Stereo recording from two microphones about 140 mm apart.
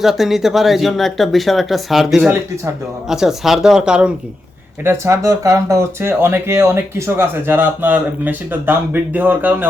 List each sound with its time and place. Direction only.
0.0 s speech: centre (ahead or behind)
4.8 s speech: 20° right (ahead or behind)